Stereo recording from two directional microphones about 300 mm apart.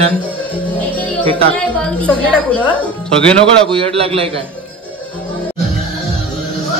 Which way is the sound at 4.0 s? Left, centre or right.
Centre.